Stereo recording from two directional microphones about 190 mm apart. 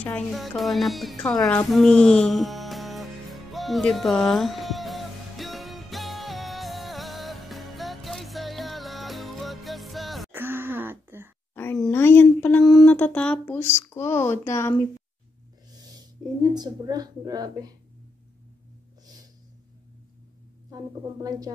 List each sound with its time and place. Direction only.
0.0 s speech: 5° left (ahead or behind)
1.7 s music: 5° left (ahead or behind)
10.3 s throat clearing: 10° right (ahead or behind)
11.5 s a sound: 10° left (ahead or behind)
15.7 s a sound: 20° right (ahead or behind)
16.5 s speech: 20° right (ahead or behind)
20.7 s speech: 20° right (ahead or behind)